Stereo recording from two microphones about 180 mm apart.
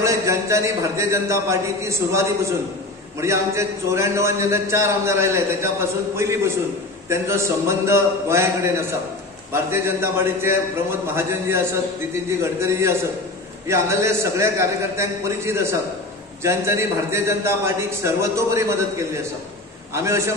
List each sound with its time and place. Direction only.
0.0 s a man's voice: 15° right (ahead or behind)